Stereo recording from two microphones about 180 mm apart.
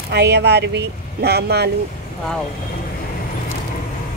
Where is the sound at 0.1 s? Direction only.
70° right (ahead or behind).